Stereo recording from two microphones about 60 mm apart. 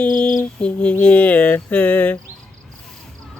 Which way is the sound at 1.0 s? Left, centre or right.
Left.